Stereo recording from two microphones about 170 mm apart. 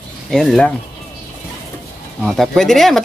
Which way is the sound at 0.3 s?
Centre (ahead or behind).